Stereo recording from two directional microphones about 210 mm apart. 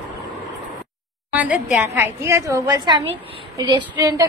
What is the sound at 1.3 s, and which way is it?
A woman's voice, 5° right (ahead or behind).